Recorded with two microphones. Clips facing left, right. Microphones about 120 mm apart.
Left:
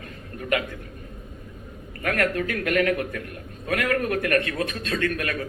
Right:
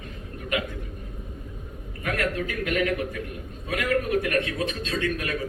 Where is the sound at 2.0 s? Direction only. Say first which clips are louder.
Left 3 dB; 55° left (ahead or behind).